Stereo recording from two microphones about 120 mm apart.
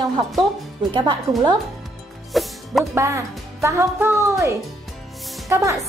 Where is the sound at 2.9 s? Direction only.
25° right (ahead or behind).